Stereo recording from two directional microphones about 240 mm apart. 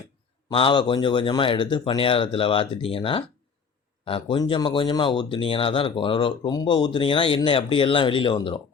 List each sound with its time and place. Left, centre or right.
0.5 s speech: left